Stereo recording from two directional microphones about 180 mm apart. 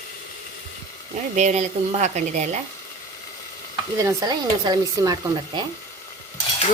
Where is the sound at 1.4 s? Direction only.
40° right (ahead or behind).